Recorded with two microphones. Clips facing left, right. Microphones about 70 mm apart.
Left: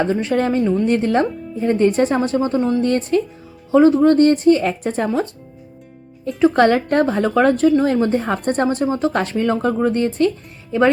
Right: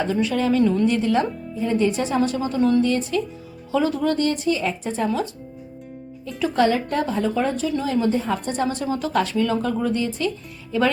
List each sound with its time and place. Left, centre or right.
0.0 s a woman's voice: left
2.6 s speech: centre
2.8 s speech: left
3.7 s speech: left
5.0 s a woman's voice: left
6.6 s a woman's voice: left
7.8 s a woman's voice: left